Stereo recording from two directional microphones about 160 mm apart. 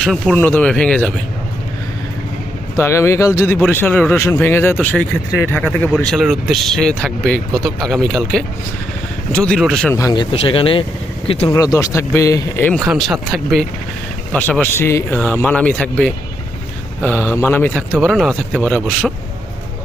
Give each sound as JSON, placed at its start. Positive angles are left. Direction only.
{"t": 0.0, "sound": "speech", "side_deg": 0}
{"t": 2.7, "sound": "speech", "side_deg": 15}
{"t": 9.9, "sound": "speech", "side_deg": 25}
{"t": 10.3, "sound": "speech", "side_deg": 35}
{"t": 11.4, "sound": "speech", "side_deg": 20}
{"t": 12.9, "sound": "speech", "side_deg": 0}